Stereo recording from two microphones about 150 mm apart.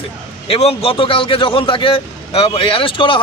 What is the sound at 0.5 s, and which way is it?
Speech, 40° left (ahead or behind).